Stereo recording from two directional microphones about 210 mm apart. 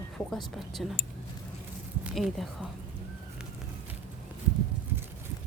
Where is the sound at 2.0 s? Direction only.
Centre (ahead or behind).